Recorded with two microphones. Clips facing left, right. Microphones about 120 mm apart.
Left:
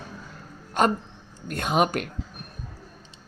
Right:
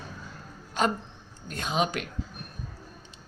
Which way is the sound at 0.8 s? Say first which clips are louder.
Left 4 dB; 55° left (ahead or behind).